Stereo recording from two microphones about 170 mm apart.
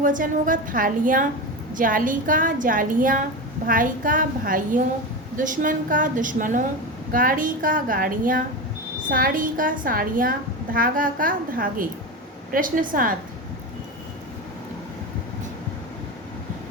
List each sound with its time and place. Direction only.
0.0 s a woman's voice: 50° right (ahead or behind)